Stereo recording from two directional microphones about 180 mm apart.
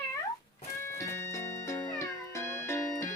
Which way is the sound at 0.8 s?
15° left (ahead or behind).